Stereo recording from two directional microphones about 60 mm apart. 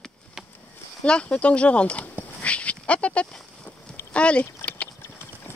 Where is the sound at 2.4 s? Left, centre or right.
Left.